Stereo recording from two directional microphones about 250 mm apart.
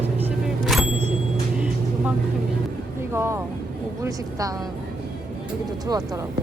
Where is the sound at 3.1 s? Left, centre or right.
Centre.